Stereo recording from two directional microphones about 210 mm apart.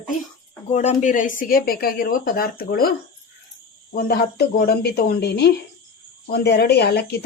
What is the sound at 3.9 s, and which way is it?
Speech, 50° left (ahead or behind).